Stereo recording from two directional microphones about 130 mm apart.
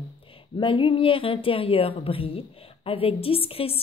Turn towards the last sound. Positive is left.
turn(degrees=45)  # may be behind; listen again after turning